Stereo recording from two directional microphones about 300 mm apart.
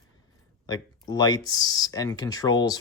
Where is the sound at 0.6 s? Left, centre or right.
Centre.